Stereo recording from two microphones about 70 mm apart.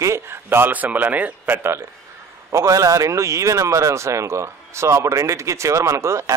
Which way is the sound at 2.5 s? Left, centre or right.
Right.